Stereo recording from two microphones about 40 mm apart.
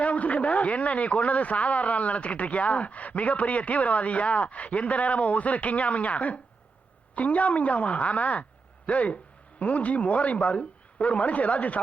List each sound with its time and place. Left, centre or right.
0.0 s a man's voice: left